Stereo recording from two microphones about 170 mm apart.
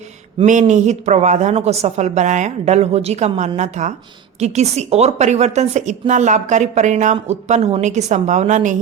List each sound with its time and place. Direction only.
0.4 s a woman's voice: 45° right (ahead or behind)